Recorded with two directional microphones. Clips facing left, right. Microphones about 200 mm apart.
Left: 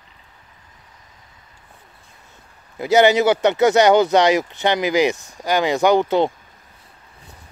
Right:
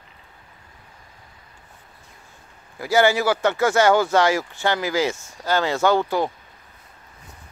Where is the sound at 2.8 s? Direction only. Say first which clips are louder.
Left 4 dB; 20° left (ahead or behind).